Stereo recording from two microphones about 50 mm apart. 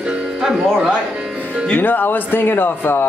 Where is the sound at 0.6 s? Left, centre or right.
Centre.